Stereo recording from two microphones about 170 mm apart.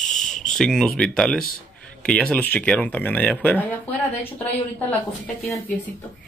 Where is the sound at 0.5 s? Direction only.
5° left (ahead or behind).